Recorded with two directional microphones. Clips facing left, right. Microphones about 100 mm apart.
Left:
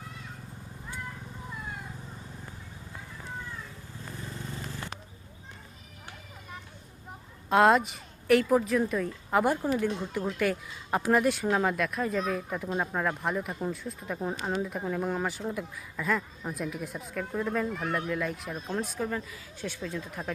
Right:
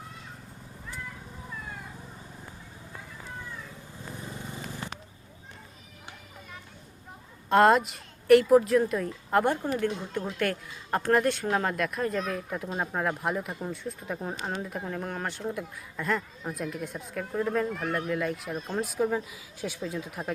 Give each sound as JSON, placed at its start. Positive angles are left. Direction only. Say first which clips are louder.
{"t": 4.1, "sound": "vehicle", "louder": "even", "side_deg": -15}
{"t": 7.5, "sound": "speech", "louder": "right 1 dB", "side_deg": 0}